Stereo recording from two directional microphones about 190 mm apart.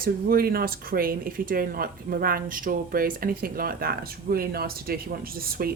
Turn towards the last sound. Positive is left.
turn(degrees=-50)  # may be behind; listen again after turning